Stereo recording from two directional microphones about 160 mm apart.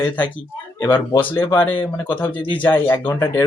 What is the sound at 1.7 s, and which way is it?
Speech, 30° left (ahead or behind).